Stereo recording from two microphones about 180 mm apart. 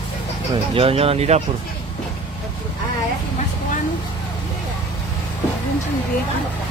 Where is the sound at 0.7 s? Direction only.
30° right (ahead or behind).